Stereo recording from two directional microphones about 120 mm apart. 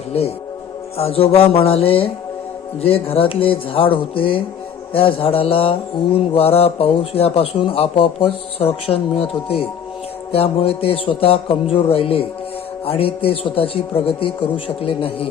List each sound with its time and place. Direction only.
0.1 s a man's voice: 55° left (ahead or behind)